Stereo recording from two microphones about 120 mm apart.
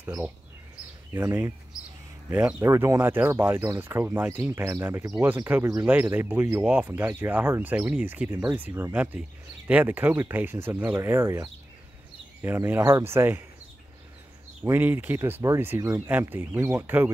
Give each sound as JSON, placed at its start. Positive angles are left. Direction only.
{"t": 1.1, "sound": "speech", "side_deg": -20}
{"t": 5.9, "sound": "speech", "side_deg": -15}
{"t": 14.6, "sound": "speech", "side_deg": -15}